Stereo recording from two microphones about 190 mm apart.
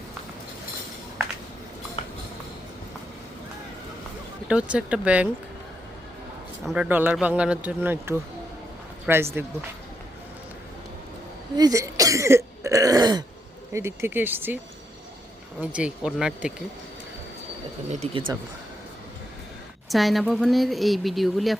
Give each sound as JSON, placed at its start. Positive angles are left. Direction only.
{"t": 4.4, "sound": "speech", "side_deg": -5}
{"t": 6.7, "sound": "speech", "side_deg": -5}
{"t": 11.5, "sound": "speech", "side_deg": -20}
{"t": 15.6, "sound": "speech", "side_deg": -5}
{"t": 17.8, "sound": "speech", "side_deg": -35}
{"t": 19.9, "sound": "speech", "side_deg": 0}